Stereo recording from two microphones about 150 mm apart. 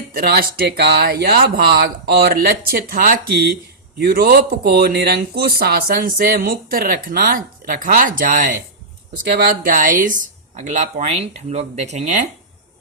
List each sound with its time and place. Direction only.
0.1 s speech: 80° right; by 8.5 s 65° right (ahead or behind)
9.2 s speech: 75° right (ahead or behind); by 12.2 s 50° right (ahead or behind)